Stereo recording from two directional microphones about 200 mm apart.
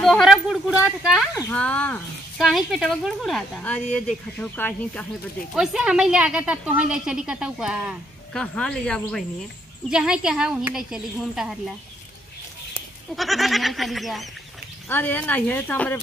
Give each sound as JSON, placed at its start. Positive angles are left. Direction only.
{"t": 0.0, "sound": "speech", "side_deg": 0}
{"t": 1.3, "sound": "speech", "side_deg": 15}
{"t": 13.1, "sound": "speech", "side_deg": 0}